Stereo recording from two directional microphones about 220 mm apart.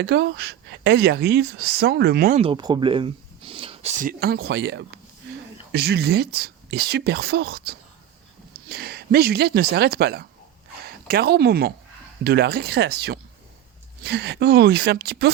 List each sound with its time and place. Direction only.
0.0 s speech: 50° right (ahead or behind)
2.4 s speech: 20° right (ahead or behind)
4.2 s speech: 45° right (ahead or behind)